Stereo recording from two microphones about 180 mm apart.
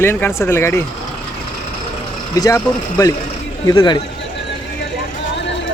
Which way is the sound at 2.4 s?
20° left (ahead or behind).